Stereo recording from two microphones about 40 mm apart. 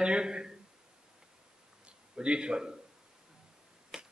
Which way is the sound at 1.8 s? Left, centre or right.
Right.